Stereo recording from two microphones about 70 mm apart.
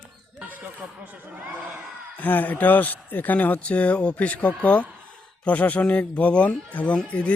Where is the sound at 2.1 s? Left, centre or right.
Left.